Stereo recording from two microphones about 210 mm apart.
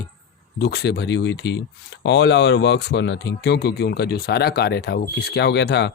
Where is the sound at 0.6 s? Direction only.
50° left (ahead or behind).